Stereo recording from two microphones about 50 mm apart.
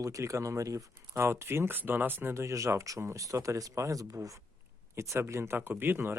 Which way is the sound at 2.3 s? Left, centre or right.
Right.